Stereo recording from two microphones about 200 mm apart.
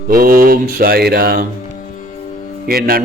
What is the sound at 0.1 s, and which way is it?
Speech, 45° right (ahead or behind).